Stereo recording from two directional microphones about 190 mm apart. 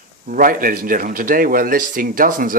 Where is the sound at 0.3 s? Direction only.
45° right (ahead or behind).